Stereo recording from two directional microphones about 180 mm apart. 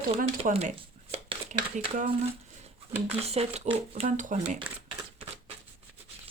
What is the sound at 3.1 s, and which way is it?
Speech, 35° right (ahead or behind).